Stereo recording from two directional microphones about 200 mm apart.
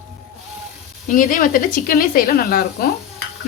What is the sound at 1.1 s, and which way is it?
Speech, 40° left (ahead or behind).